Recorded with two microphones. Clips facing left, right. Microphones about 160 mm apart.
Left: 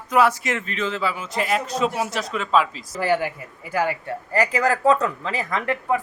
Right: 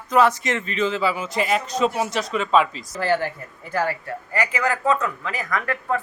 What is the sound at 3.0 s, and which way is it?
A man's voice, 10° left (ahead or behind).